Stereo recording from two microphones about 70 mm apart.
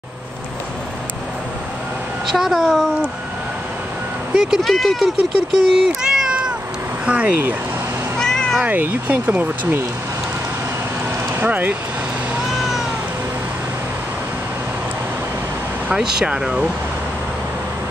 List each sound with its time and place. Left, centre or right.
2.2 s speech: centre
4.4 s speech: centre
5.6 s cat: centre
7.1 s speech: centre
8.2 s cat: centre
8.6 s speech: right
11.4 s speech: right
15.9 s speech: centre